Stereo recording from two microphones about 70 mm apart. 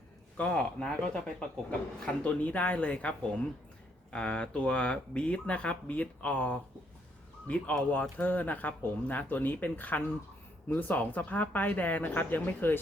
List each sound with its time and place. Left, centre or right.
0.3 s a woman's voice: centre